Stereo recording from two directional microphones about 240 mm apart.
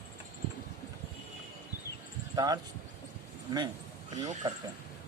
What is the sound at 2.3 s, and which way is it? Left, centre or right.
Speech, centre.